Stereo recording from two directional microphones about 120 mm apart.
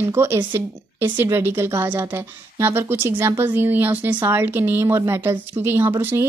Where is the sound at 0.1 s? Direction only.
20° right (ahead or behind).